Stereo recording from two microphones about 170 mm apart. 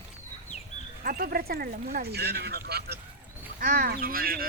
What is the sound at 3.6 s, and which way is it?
Speech, 55° right (ahead or behind).